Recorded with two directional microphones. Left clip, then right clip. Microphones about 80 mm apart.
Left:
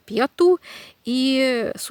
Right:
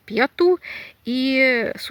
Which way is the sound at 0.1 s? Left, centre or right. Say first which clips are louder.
Even; left.